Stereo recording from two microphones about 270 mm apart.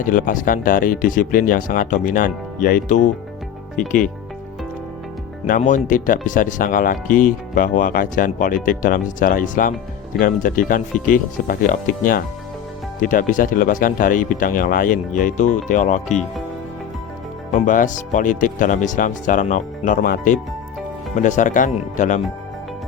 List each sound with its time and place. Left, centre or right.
0.0 s speech: left
5.5 s speech: left
17.5 s speech: left